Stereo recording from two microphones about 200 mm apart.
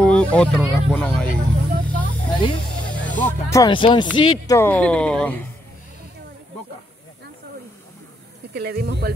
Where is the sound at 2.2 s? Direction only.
20° left (ahead or behind).